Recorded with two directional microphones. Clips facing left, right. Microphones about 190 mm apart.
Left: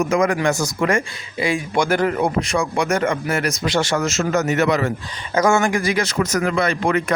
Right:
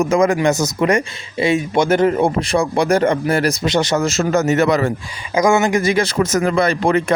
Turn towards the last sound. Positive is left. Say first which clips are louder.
# right 3 dB
turn(degrees=-30)  # may be behind; listen again after turning